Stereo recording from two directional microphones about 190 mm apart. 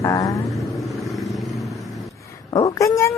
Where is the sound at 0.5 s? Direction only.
Centre (ahead or behind).